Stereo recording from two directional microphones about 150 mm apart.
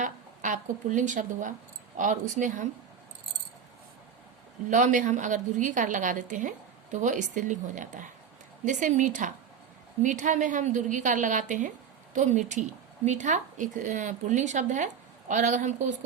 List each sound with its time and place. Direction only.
0.0 s a woman's voice: 55° right (ahead or behind)
4.7 s a woman's voice: 55° right (ahead or behind)